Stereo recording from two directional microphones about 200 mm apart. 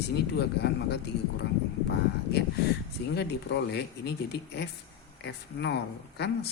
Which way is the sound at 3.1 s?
55° left (ahead or behind).